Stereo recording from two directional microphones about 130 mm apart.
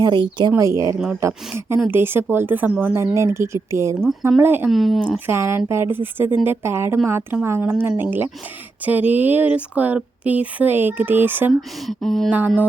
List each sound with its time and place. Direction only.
0.0 s speech: 35° right (ahead or behind)
0.5 s speech: 20° right (ahead or behind)
4.7 s speech: centre (ahead or behind)
5.1 s speech: 15° right (ahead or behind)
11.9 s speech: 5° left (ahead or behind)